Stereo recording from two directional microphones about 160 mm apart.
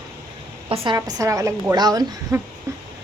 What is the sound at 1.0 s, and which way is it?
A woman's voice, 20° right (ahead or behind).